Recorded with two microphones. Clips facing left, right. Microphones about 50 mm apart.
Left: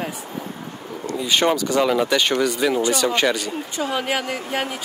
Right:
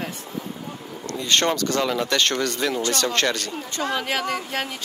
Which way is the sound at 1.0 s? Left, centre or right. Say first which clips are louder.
Left 2 dB; centre.